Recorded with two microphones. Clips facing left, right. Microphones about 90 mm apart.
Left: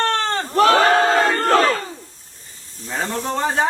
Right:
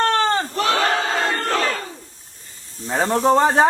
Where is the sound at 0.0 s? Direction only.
10° right (ahead or behind).